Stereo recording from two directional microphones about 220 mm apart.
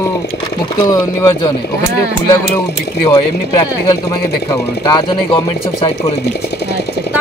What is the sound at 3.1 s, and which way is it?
Speech, 15° left (ahead or behind).